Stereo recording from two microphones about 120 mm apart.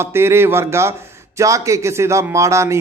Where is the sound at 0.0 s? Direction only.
20° right (ahead or behind).